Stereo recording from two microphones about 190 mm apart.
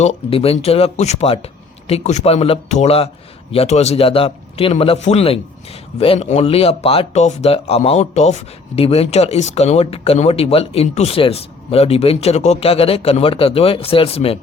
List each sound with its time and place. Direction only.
0.0 s speech: 30° left (ahead or behind)